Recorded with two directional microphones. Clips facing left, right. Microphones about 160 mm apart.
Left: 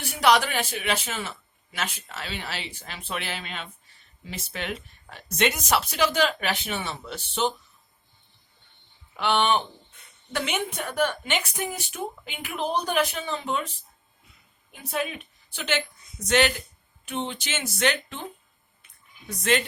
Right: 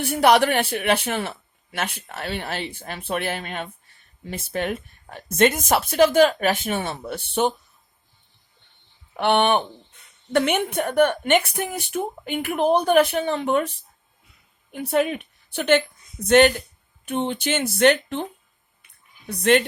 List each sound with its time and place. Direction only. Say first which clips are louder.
0.0 s speech: right 5 dB; 55° right (ahead or behind)
9.1 s a woman's voice: right 4 dB; 55° right (ahead or behind)
19.3 s speech: right 6 dB; 60° right (ahead or behind)